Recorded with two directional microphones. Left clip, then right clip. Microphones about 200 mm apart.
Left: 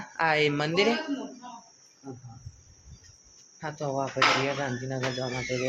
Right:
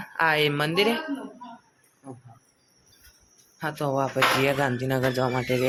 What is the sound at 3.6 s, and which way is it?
Speech, 20° right (ahead or behind).